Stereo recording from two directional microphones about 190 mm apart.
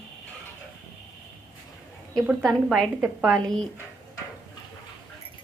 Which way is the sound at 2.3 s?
Centre (ahead or behind).